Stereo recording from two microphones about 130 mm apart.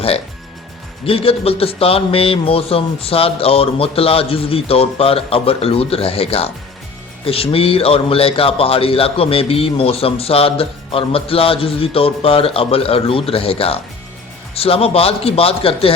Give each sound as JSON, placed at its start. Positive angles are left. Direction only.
{"t": 1.0, "sound": "speech", "side_deg": 45}